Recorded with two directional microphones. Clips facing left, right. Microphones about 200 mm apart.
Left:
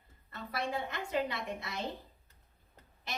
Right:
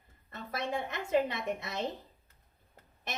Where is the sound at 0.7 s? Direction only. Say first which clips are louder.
Right 8 dB; 20° right (ahead or behind).